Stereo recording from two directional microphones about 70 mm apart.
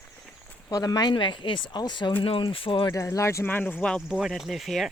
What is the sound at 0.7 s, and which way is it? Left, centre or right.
Speech, left.